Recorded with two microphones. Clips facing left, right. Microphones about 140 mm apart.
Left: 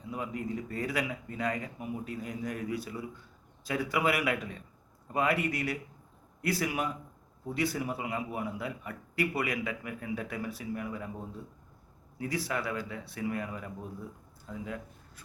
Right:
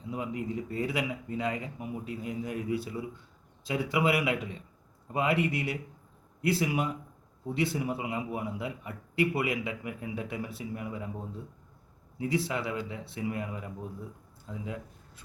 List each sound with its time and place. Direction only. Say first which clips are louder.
0.1 s a man's voice: right 2 dB; 20° right (ahead or behind)
12.2 s a man's voice: right 3 dB; 25° right (ahead or behind)
14.6 s a sound: even; 20° right (ahead or behind)